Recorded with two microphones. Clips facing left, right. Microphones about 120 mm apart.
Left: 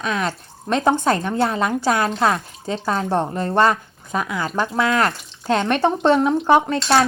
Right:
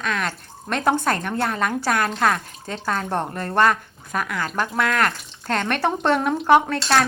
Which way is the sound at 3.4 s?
25° left (ahead or behind).